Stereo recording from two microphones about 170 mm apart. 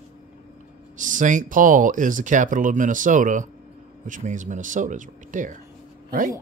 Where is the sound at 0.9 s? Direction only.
50° right (ahead or behind).